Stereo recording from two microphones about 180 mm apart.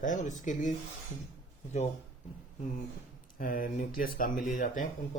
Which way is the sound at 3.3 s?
50° left (ahead or behind).